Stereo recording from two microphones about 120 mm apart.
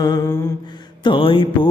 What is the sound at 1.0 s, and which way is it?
Mantra, 45° left (ahead or behind).